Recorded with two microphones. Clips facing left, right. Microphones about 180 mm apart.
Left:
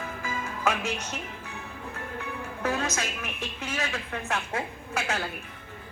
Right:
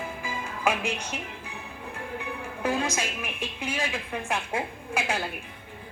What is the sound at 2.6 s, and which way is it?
Speech, 10° right (ahead or behind).